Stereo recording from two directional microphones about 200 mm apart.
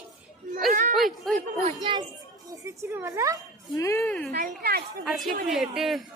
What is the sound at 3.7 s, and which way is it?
Speech, 15° left (ahead or behind).